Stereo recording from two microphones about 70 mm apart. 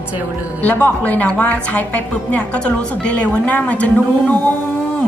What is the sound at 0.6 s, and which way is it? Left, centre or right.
A woman's voice, left.